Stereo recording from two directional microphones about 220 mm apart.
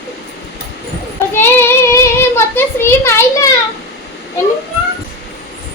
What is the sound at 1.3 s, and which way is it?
Child singing, 10° left (ahead or behind).